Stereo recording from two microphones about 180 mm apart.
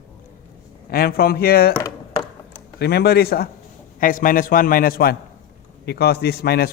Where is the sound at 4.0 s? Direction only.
50° left (ahead or behind).